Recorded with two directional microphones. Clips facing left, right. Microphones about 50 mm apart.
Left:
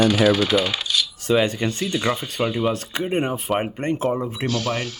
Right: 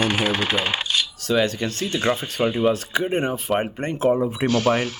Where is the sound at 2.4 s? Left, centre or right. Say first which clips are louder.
Right 1 dB; right.